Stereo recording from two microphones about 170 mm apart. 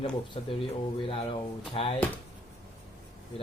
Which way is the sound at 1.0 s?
30° left (ahead or behind).